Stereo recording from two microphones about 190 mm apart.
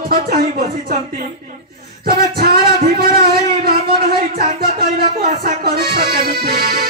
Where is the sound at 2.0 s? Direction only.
55° right (ahead or behind).